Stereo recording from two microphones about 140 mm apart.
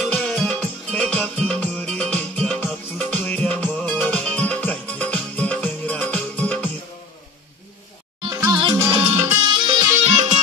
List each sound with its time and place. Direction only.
0.0 s music: 5° left (ahead or behind)
8.2 s music: 35° right (ahead or behind)
10.0 s music: 55° right (ahead or behind)